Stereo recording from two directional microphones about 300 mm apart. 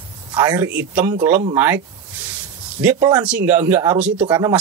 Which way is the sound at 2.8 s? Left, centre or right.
Centre.